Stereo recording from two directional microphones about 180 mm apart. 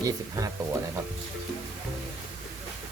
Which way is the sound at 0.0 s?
20° right (ahead or behind).